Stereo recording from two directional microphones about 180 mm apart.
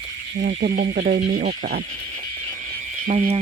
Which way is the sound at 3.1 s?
40° right (ahead or behind).